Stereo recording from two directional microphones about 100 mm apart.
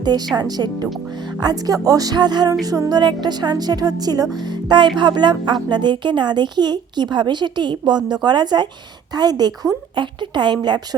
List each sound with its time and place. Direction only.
0.3 s speech: 45° right (ahead or behind)
1.4 s music: 40° right (ahead or behind)
3.0 s speech: 50° right (ahead or behind)